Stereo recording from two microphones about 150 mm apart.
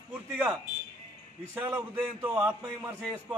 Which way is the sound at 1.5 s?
10° right (ahead or behind).